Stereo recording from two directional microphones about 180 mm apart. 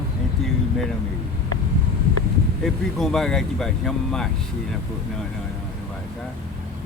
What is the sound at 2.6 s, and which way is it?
Speech, centre (ahead or behind).